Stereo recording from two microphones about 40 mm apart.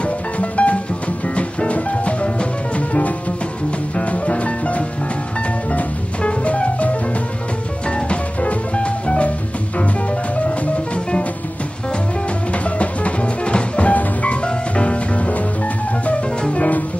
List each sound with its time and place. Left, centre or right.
0.0 s music: left
12.6 s music: left